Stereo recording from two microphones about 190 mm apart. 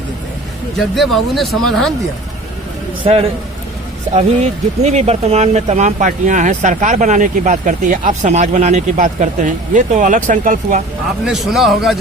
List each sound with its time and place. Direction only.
0.9 s speech: centre (ahead or behind)
3.0 s speech: 30° right (ahead or behind)
11.3 s speech: centre (ahead or behind)